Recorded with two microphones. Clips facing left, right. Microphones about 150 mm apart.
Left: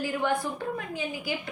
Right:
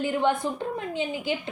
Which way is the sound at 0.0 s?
25° right (ahead or behind).